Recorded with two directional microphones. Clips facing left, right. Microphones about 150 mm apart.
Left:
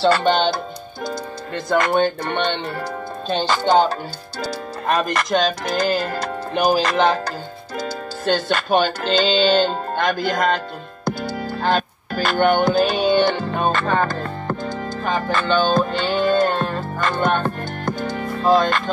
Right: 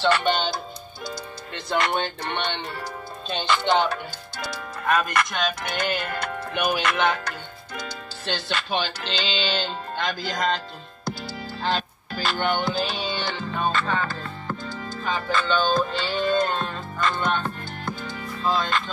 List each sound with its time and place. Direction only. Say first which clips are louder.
0.0 s speech: left 6 dB; 40° left (ahead or behind); by 10.6 s 55° left (ahead or behind)
11.6 s music: left 6 dB; 55° left (ahead or behind)